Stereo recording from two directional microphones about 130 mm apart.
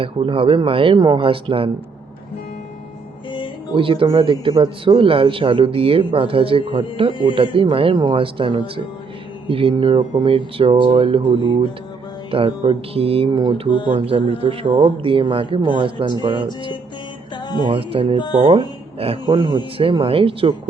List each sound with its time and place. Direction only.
0.0 s speech: 45° right (ahead or behind)
3.8 s speech: 45° right (ahead or behind)
7.1 s speech: 40° left (ahead or behind)
7.3 s speech: 40° right (ahead or behind)
17.7 s speech: 40° right (ahead or behind)
19.2 s speech: 35° right (ahead or behind)